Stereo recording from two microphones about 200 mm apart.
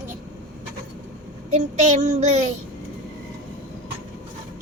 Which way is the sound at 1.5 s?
35° right (ahead or behind).